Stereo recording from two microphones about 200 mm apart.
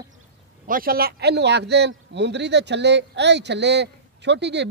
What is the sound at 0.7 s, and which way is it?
Speech, 45° right (ahead or behind).